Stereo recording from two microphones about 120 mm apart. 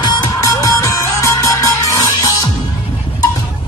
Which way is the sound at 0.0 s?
30° left (ahead or behind).